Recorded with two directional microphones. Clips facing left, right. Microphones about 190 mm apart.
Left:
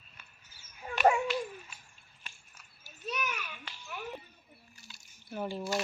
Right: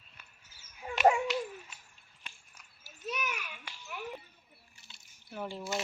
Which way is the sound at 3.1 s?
10° right (ahead or behind).